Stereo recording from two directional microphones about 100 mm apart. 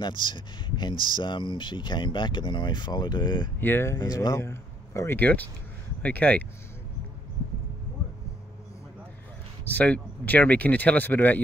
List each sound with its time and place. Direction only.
0.0 s speech: 50° left (ahead or behind)
3.6 s speech: 25° left (ahead or behind)
4.0 s speech: 40° left (ahead or behind)
4.4 s speech: 25° left (ahead or behind)
9.8 s speech: 15° left (ahead or behind)